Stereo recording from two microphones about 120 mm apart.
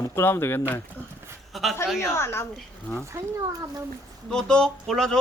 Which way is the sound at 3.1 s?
20° right (ahead or behind).